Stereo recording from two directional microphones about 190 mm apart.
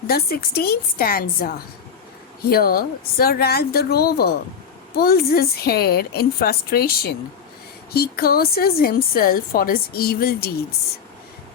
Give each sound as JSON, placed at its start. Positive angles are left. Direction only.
{"t": 0.1, "sound": "a woman's voice", "side_deg": 55}